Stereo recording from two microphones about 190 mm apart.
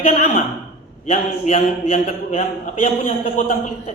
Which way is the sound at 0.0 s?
35° left (ahead or behind).